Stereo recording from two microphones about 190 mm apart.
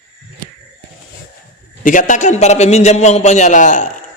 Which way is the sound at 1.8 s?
45° left (ahead or behind).